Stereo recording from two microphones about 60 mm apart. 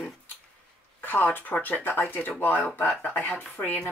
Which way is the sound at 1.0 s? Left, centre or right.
Left.